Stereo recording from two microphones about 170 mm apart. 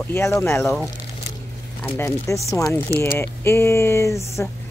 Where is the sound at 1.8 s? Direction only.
15° left (ahead or behind).